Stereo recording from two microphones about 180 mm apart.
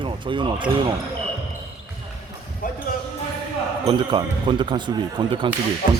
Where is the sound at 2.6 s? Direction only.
50° left (ahead or behind).